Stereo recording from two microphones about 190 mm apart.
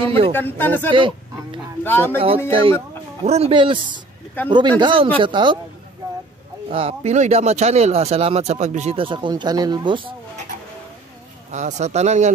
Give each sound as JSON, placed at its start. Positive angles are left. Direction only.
{"t": 0.0, "sound": "speech", "side_deg": -30}
{"t": 0.3, "sound": "speech", "side_deg": 10}
{"t": 0.9, "sound": "speech", "side_deg": -25}
{"t": 1.9, "sound": "speech", "side_deg": 10}
{"t": 2.1, "sound": "speech", "side_deg": -30}
{"t": 6.7, "sound": "speech", "side_deg": -30}
{"t": 11.5, "sound": "speech", "side_deg": -35}